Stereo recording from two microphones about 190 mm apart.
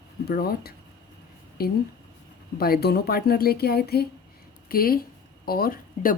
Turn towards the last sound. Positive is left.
turn(degrees=50)  # may be behind; listen again after turning